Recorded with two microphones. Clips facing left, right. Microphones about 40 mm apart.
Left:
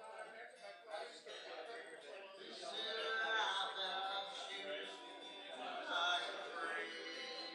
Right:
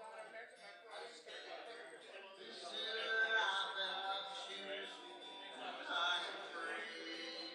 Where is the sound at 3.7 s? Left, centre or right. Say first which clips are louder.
Even; centre.